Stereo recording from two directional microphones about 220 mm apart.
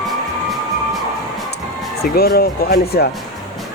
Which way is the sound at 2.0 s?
45° left (ahead or behind).